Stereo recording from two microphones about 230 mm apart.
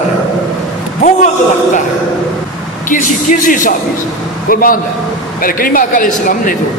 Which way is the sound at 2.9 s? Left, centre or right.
Left.